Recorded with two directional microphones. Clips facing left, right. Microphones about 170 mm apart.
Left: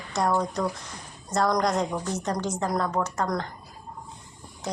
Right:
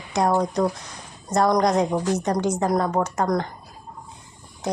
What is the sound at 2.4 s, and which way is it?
A woman's voice, 15° right (ahead or behind).